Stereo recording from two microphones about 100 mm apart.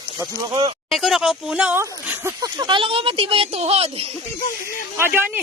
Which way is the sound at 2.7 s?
60° right (ahead or behind).